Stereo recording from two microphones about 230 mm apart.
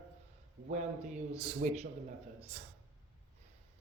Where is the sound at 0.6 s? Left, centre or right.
Right.